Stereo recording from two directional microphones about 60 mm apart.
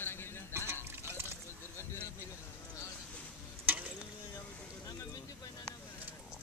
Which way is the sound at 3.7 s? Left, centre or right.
Right.